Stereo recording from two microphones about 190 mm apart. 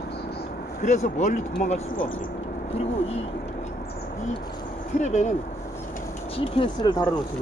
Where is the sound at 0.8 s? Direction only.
40° left (ahead or behind).